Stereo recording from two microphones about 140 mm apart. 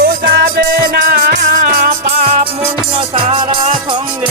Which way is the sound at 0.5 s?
90° right.